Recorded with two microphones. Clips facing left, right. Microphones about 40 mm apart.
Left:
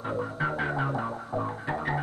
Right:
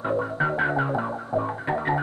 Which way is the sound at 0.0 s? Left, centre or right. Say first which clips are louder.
Right 5 dB; centre.